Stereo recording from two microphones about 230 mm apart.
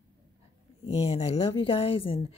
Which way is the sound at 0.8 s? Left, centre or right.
Left.